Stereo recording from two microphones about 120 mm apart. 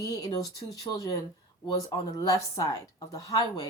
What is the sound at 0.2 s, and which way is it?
Speech, 30° left (ahead or behind).